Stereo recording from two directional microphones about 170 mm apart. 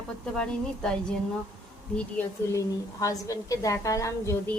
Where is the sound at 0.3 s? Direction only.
5° left (ahead or behind).